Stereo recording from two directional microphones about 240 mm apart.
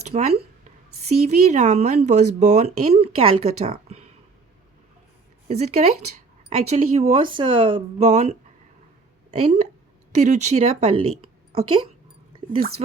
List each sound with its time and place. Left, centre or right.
0.0 s speech: right
5.5 s speech: right
11.2 s a sound: right